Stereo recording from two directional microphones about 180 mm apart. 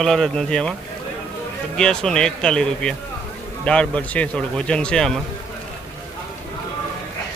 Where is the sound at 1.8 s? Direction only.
5° left (ahead or behind).